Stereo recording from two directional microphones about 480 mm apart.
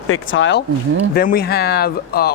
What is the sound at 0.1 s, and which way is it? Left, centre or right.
Speech, left.